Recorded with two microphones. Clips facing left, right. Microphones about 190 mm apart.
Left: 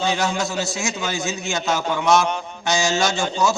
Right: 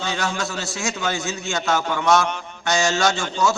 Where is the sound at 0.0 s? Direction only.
15° left (ahead or behind).